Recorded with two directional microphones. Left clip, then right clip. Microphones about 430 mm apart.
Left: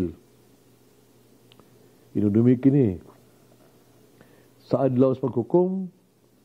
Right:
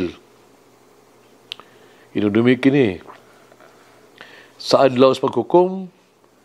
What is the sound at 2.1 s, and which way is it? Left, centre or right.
A man's voice, centre.